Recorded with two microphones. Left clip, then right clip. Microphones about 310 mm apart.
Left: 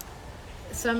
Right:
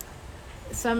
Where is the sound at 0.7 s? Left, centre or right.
Centre.